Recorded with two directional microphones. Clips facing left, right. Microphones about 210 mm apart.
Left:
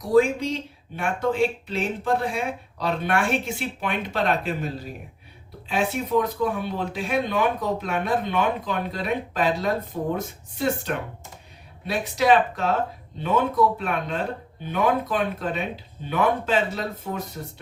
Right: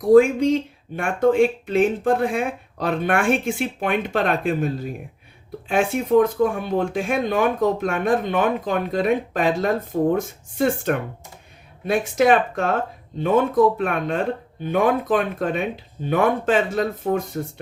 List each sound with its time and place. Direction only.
0.1 s speech: 50° right (ahead or behind)